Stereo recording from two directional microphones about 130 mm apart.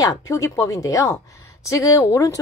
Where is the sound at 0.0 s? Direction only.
25° left (ahead or behind).